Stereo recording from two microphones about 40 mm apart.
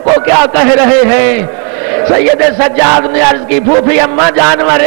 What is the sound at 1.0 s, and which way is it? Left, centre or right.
A man's voice, centre.